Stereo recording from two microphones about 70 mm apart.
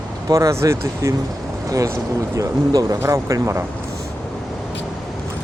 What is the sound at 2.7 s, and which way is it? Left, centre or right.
Speech, right.